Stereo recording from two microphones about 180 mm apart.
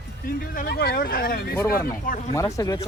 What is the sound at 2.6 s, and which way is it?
Speech, 20° left (ahead or behind).